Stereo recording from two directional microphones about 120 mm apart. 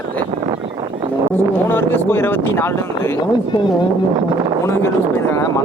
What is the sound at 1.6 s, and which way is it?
Speech, 15° left (ahead or behind).